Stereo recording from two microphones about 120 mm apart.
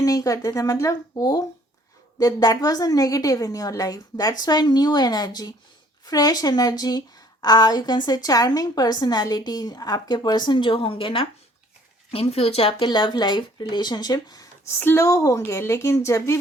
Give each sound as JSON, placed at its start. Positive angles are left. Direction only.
{"t": 0.0, "sound": "a woman's voice", "side_deg": 30}
{"t": 12.9, "sound": "a woman's voice", "side_deg": 40}
{"t": 14.8, "sound": "a woman's voice", "side_deg": 20}